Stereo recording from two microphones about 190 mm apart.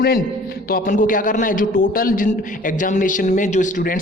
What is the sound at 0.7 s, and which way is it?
A man's voice, 45° left (ahead or behind).